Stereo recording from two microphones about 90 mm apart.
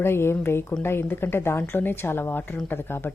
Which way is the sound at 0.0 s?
25° left (ahead or behind).